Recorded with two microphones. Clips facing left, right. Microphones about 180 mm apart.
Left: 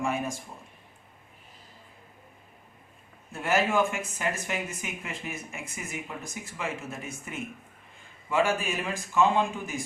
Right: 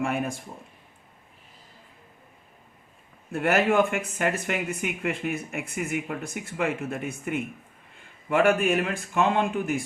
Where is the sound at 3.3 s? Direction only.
60° right (ahead or behind).